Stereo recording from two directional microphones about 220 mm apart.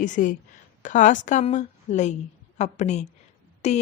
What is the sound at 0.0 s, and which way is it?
A woman's voice, 35° left (ahead or behind).